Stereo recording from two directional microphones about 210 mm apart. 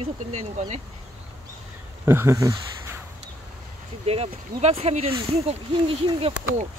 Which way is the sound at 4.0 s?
30° right (ahead or behind).